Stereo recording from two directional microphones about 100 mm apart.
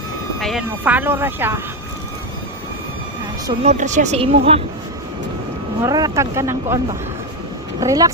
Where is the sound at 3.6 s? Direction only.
85° right.